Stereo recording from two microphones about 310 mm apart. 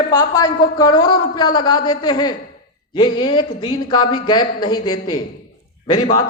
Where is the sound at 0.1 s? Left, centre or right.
Centre.